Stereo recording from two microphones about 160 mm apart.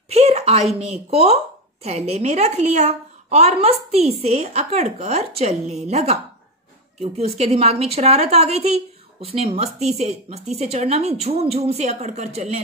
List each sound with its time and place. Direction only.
0.1 s a woman's voice: 45° right (ahead or behind)